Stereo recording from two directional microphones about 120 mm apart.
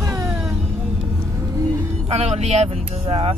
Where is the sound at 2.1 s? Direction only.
65° right (ahead or behind).